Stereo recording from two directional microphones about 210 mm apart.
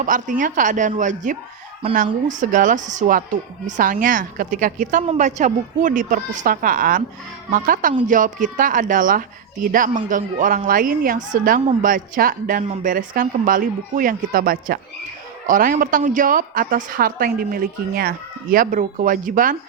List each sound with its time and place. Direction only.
0.0 s a woman's voice: 40° right (ahead or behind)